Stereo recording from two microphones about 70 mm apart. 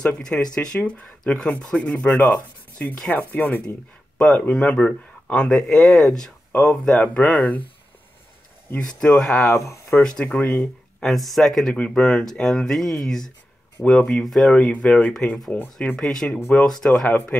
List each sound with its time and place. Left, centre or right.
0.0 s speech: centre; by 3.6 s left
4.2 s speech: centre
8.8 s speech: centre
9.4 s speech: left
10.0 s speech: centre
11.7 s speech: centre
14.7 s speech: centre
16.0 s speech: centre